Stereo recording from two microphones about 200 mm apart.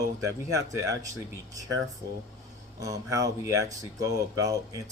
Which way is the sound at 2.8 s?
15° right (ahead or behind).